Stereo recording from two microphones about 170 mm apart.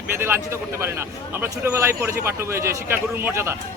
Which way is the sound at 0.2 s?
15° right (ahead or behind).